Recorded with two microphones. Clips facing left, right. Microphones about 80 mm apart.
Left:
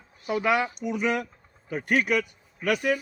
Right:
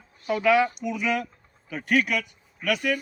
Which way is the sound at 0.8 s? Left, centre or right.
Left.